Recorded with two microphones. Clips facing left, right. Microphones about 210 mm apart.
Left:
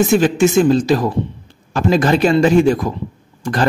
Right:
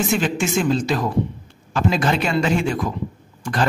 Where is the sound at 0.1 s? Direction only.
40° left (ahead or behind).